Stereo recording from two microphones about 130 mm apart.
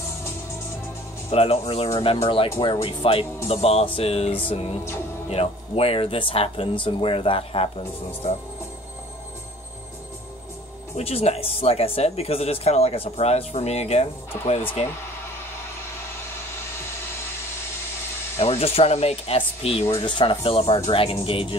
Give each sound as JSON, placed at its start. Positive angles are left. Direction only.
{"t": 1.3, "sound": "speech", "side_deg": 50}
{"t": 11.0, "sound": "speech", "side_deg": 50}
{"t": 18.4, "sound": "speech", "side_deg": 50}